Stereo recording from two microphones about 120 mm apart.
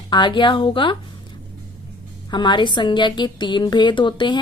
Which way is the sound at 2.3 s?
40° left (ahead or behind).